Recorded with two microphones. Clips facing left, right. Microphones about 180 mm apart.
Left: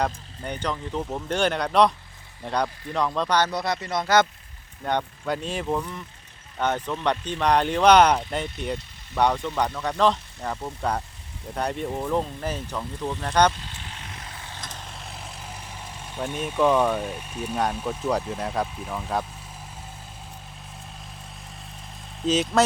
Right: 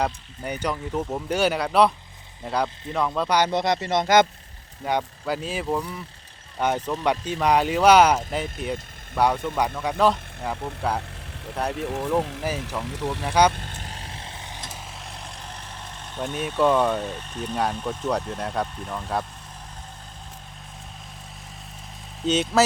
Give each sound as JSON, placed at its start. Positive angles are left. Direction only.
{"t": 0.0, "sound": "speech", "side_deg": -10}
{"t": 3.5, "sound": "speech", "side_deg": -20}
{"t": 4.8, "sound": "speech", "side_deg": -5}
{"t": 12.8, "sound": "speech", "side_deg": -80}
{"t": 13.2, "sound": "speech", "side_deg": -10}
{"t": 13.5, "sound": "vehicle", "side_deg": -50}
{"t": 14.7, "sound": "vehicle", "side_deg": 0}
{"t": 16.1, "sound": "speech", "side_deg": 0}
{"t": 22.2, "sound": "speech", "side_deg": 0}